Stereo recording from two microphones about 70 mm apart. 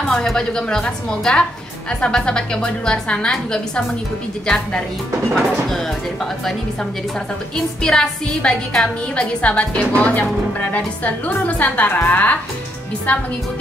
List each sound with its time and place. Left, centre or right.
0.1 s a woman's voice: centre
5.3 s speech: centre
7.8 s a woman's voice: centre